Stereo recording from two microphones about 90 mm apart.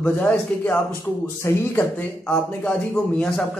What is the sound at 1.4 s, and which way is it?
Speech, 30° left (ahead or behind).